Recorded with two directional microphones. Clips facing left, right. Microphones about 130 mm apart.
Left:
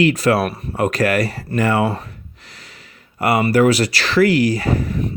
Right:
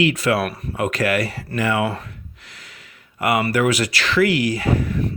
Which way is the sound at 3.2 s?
35° left (ahead or behind).